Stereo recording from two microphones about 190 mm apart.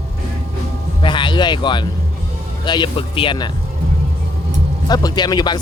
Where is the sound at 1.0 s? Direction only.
25° left (ahead or behind).